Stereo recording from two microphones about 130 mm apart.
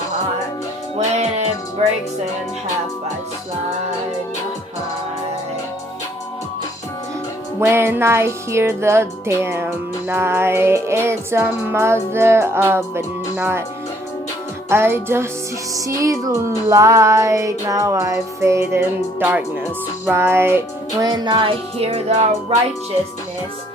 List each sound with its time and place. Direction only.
1.8 s speech: 55° right (ahead or behind)
7.6 s music: 20° right (ahead or behind)
14.7 s music: 20° right (ahead or behind)
21.0 s music: 30° right (ahead or behind); by 22.5 s 55° right (ahead or behind)